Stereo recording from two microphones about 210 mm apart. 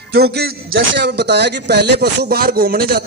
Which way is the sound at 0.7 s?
60° right (ahead or behind).